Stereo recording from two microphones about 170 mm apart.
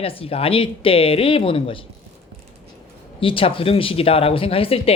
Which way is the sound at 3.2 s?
30° left (ahead or behind).